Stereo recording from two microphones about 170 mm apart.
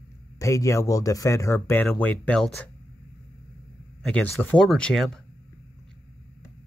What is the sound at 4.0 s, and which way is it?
A man's voice, 10° left (ahead or behind).